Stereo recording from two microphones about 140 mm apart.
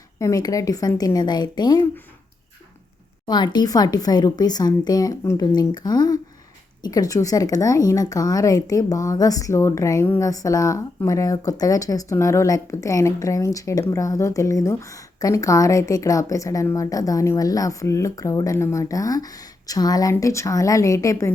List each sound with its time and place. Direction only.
0.2 s speech: 25° left (ahead or behind)
3.2 s speech: 30° left (ahead or behind)